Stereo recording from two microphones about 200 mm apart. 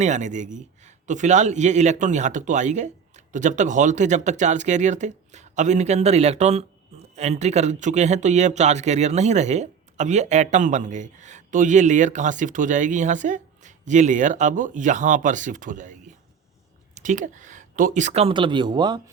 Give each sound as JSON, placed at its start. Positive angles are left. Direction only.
{"t": 0.0, "sound": "speech", "side_deg": -35}